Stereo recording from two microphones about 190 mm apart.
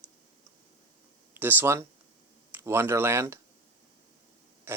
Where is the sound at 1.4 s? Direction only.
10° right (ahead or behind).